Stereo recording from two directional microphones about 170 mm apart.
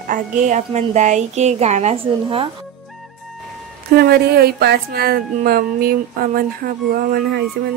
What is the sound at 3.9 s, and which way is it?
Speech, 70° right (ahead or behind).